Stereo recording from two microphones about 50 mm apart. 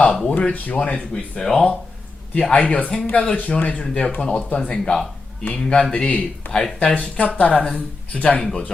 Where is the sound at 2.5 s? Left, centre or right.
Left; by 4.4 s centre.